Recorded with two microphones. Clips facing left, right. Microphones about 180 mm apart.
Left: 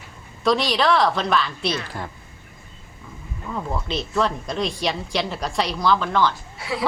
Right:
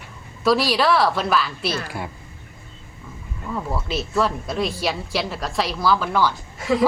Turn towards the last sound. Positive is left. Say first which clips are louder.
# right 7 dB
turn(degrees=-45)  # may be behind; listen again after turning